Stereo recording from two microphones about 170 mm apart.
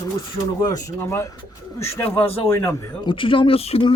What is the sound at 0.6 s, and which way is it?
Speech, 20° left (ahead or behind).